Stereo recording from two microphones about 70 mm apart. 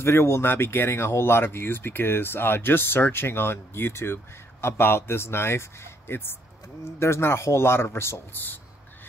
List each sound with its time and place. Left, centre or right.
0.0 s speech: left